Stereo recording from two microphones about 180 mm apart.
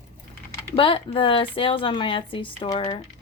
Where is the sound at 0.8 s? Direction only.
30° left (ahead or behind).